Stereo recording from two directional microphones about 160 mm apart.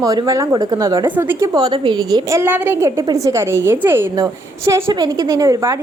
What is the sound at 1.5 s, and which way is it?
Speech, 30° right (ahead or behind).